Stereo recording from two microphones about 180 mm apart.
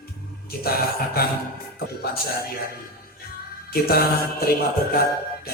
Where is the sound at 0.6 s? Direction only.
55° left (ahead or behind).